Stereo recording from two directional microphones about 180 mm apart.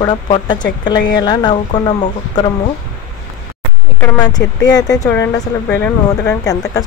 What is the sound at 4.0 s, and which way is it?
Speech, 20° left (ahead or behind).